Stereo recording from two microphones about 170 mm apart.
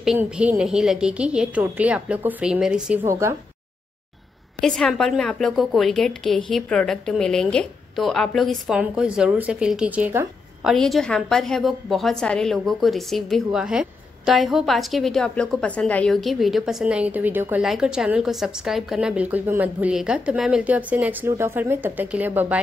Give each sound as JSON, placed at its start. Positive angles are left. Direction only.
{"t": 0.0, "sound": "a woman's voice", "side_deg": -5}
{"t": 3.1, "sound": "speech", "side_deg": -15}
{"t": 4.6, "sound": "a woman's voice", "side_deg": 0}